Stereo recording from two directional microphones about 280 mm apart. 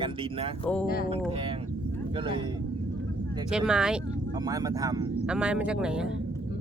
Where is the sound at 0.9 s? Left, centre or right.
Left.